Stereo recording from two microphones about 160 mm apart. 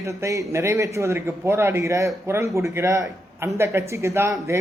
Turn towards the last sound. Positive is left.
turn(degrees=-20)  # may be behind; listen again after turning